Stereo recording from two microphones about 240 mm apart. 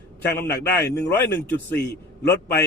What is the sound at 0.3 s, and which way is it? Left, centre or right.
Speech, centre.